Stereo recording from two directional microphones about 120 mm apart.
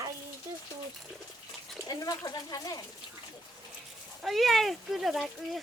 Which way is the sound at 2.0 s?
30° left (ahead or behind).